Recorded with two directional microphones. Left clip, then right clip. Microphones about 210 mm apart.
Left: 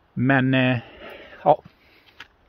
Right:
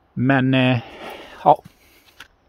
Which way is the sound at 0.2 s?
10° right (ahead or behind).